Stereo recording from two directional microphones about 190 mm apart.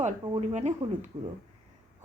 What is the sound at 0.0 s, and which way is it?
Speech, 35° right (ahead or behind).